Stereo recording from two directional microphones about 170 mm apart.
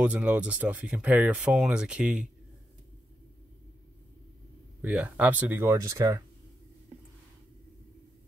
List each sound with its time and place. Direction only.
0.0 s speech: 5° right (ahead or behind)
4.8 s speech: 10° right (ahead or behind)